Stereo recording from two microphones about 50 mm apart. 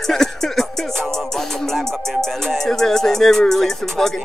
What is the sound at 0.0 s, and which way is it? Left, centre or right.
Music, centre.